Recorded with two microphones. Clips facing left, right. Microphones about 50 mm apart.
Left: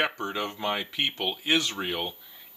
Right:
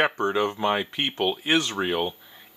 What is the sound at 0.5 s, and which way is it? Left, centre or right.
Speech, centre.